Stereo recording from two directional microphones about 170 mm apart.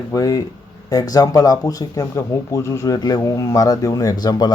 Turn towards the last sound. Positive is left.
turn(degrees=25)  # may be behind; listen again after turning